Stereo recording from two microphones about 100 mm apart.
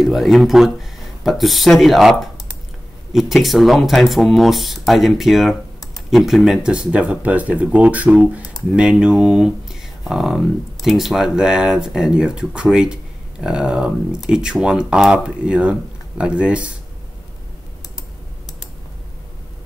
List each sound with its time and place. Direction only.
0.0 s speech: centre (ahead or behind)